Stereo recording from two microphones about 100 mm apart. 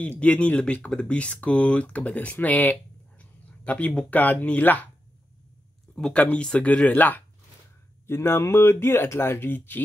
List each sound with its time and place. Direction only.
0.0 s speech: 15° left (ahead or behind)
5.9 s speech: 5° left (ahead or behind)